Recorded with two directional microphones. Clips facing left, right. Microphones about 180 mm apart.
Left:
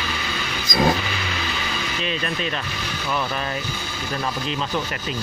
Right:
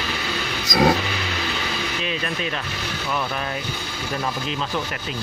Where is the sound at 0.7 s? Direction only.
65° right (ahead or behind).